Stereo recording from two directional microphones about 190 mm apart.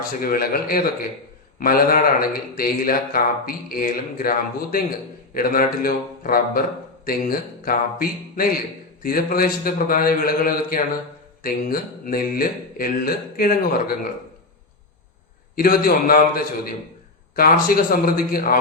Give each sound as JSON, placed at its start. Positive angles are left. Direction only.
{"t": 0.0, "sound": "speech", "side_deg": 50}
{"t": 15.5, "sound": "speech", "side_deg": 50}